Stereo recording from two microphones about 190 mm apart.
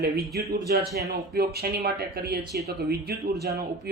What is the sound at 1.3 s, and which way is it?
Speech, 55° right (ahead or behind).